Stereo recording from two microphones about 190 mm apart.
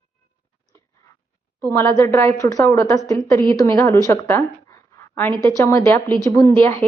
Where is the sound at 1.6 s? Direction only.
15° left (ahead or behind).